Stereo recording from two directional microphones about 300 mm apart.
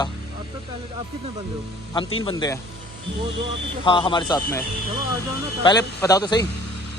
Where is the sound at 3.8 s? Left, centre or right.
Centre.